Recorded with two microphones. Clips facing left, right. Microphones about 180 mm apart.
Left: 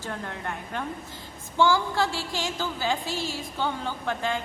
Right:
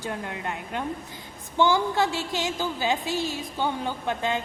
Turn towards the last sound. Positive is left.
turn(degrees=-20)  # may be behind; listen again after turning